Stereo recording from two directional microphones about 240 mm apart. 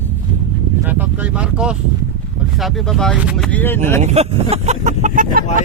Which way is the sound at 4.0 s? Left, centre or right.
Right.